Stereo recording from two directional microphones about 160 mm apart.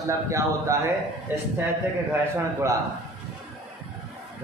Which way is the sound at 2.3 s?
15° right (ahead or behind).